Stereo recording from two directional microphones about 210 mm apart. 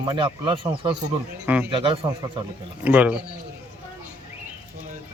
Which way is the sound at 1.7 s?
25° right (ahead or behind).